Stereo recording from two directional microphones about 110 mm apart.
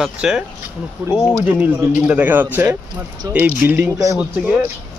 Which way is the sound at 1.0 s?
20° right (ahead or behind).